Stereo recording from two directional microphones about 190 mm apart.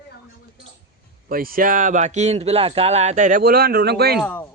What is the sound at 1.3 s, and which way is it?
A man's voice, 50° right (ahead or behind).